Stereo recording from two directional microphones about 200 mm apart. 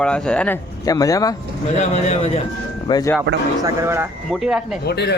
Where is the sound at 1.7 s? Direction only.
35° left (ahead or behind).